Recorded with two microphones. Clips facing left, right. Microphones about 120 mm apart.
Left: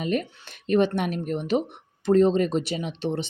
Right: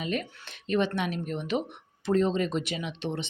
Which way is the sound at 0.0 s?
45° left (ahead or behind).